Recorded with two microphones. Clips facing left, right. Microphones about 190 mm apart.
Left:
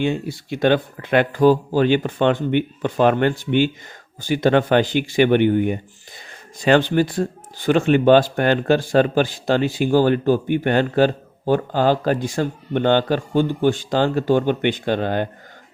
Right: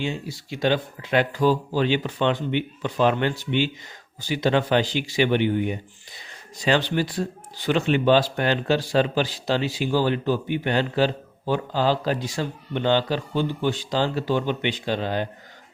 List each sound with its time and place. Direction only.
0.0 s speech: 55° left (ahead or behind)